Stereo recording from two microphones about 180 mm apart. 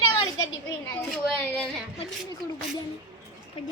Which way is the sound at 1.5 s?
5° left (ahead or behind).